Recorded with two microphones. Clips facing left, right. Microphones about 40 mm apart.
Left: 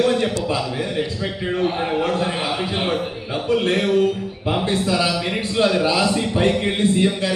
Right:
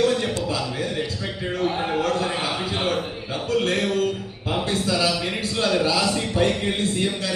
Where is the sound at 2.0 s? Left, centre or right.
Left.